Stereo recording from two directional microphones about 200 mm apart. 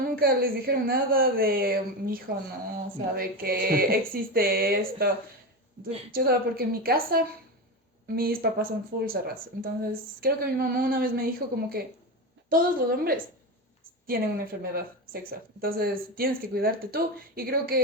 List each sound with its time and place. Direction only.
0.0 s speech: 45° right (ahead or behind)
6.1 s speech: 50° right (ahead or behind)